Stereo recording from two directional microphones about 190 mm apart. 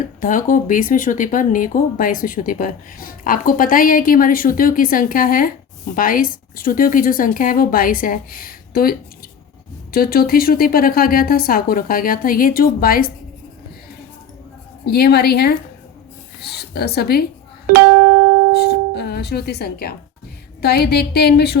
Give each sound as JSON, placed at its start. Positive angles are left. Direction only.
{"t": 0.0, "sound": "speech", "side_deg": 45}
{"t": 14.8, "sound": "a woman's voice", "side_deg": 55}
{"t": 18.5, "sound": "music", "side_deg": 60}
{"t": 20.6, "sound": "a woman's voice", "side_deg": 55}